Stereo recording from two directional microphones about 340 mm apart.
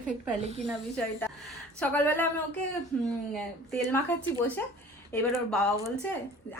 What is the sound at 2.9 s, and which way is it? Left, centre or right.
Speech, centre.